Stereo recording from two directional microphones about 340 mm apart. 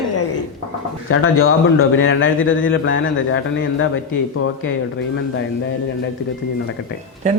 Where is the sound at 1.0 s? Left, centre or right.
Left.